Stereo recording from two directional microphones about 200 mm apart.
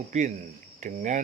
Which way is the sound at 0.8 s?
40° right (ahead or behind).